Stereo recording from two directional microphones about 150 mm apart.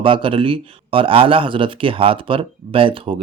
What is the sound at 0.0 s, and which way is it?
Speech, 35° right (ahead or behind).